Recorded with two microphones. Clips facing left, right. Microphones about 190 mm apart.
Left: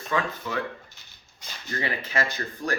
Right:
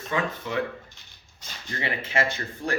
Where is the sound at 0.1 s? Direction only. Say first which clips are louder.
Even; 25° right (ahead or behind).